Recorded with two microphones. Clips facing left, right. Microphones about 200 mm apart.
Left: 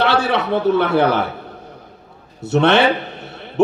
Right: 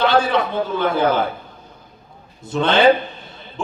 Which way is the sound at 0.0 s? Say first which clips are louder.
Even; 70° left (ahead or behind).